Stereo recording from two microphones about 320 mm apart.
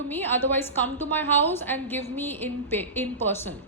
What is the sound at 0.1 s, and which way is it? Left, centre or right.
A woman's voice, centre.